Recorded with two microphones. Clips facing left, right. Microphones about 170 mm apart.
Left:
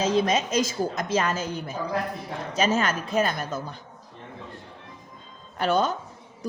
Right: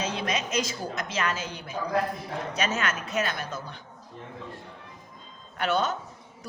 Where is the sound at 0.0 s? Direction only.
25° left (ahead or behind).